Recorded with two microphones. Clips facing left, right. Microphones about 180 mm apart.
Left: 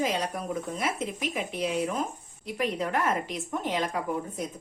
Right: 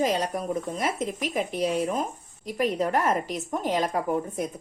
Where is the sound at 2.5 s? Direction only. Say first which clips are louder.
Right 4 dB; 45° right (ahead or behind).